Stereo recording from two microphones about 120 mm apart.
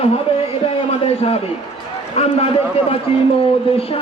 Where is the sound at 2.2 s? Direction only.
55° left (ahead or behind).